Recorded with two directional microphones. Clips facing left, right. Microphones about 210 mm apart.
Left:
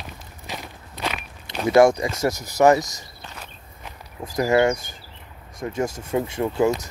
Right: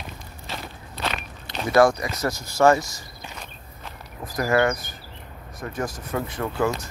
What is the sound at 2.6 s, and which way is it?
Speech, 15° left (ahead or behind).